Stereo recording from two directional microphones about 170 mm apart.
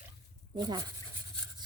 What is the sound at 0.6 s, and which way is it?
Speech, 25° right (ahead or behind).